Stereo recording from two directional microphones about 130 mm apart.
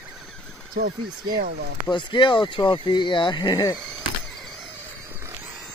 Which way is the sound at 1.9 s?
35° left (ahead or behind).